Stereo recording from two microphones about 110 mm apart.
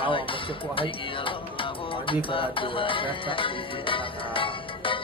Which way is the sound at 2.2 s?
50° left (ahead or behind).